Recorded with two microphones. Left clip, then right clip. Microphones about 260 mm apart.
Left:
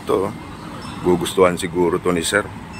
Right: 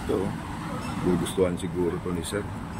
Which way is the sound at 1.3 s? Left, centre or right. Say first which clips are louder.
Left 13 dB; centre.